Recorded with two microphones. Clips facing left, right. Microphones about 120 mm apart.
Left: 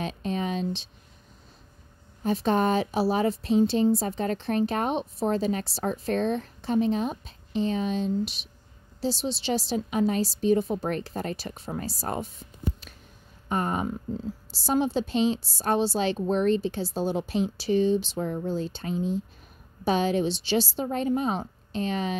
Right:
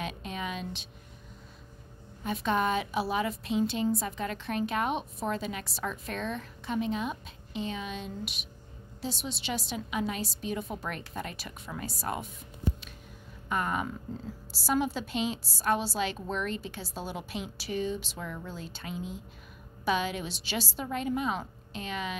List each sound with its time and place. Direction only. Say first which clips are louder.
0.0 s a sound: left 6 dB; 35° left (ahead or behind)
2.2 s a woman's voice: left 5 dB; 35° left (ahead or behind)
13.5 s a woman's voice: left 4 dB; 30° left (ahead or behind)